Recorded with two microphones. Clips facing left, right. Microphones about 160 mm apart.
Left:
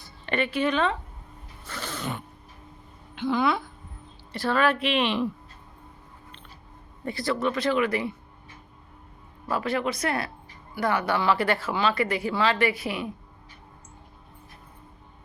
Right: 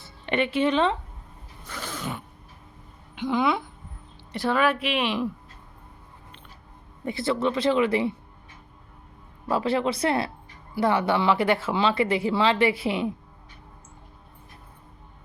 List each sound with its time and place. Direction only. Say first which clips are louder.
0.0 s speech: right 2 dB; 20° right (ahead or behind)
1.6 s roaring cats: even; 10° right (ahead or behind)
3.2 s a woman's voice: even; 20° right (ahead or behind)
7.0 s speech: right 2 dB; 20° right (ahead or behind)
9.5 s speech: right 3 dB; 25° right (ahead or behind)